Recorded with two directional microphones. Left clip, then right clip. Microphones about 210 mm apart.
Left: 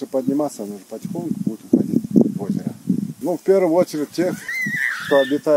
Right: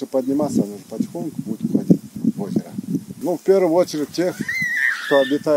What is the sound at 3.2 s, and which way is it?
Speech, 5° right (ahead or behind).